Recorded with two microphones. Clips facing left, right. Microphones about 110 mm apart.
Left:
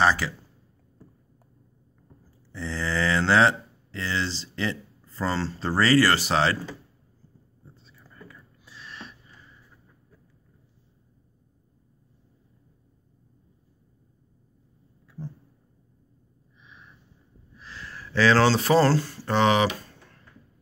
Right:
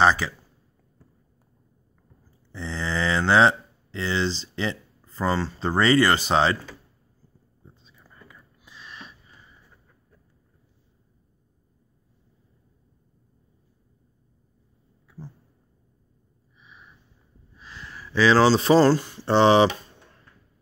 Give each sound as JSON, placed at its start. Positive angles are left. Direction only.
{"t": 0.0, "sound": "speech", "side_deg": -20}
{"t": 2.5, "sound": "speech", "side_deg": -20}
{"t": 7.6, "sound": "a sound", "side_deg": -15}
{"t": 16.6, "sound": "a sound", "side_deg": -5}
{"t": 17.6, "sound": "speech", "side_deg": -15}
{"t": 19.2, "sound": "speech", "side_deg": -30}